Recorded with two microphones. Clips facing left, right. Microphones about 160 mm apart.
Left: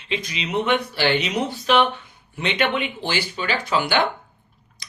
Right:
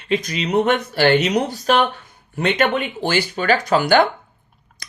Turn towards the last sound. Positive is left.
turn(degrees=-45)  # may be behind; listen again after turning